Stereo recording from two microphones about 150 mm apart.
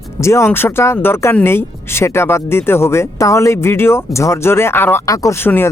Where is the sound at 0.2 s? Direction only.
20° left (ahead or behind).